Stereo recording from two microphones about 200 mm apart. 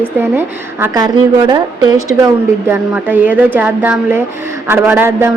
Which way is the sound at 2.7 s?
10° right (ahead or behind).